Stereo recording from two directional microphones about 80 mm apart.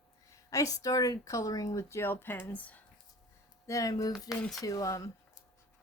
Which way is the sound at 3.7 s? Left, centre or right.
Left.